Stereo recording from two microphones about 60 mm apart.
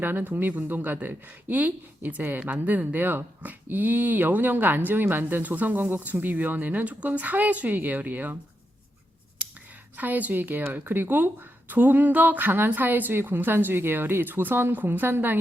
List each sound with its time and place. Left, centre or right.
0.0 s speech: right
10.0 s speech: right